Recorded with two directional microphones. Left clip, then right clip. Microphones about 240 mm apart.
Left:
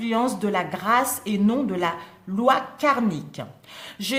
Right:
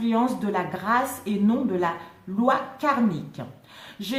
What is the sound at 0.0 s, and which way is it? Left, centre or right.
A woman's voice, left.